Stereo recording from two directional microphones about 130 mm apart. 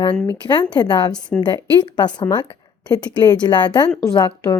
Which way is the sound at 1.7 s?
35° left (ahead or behind).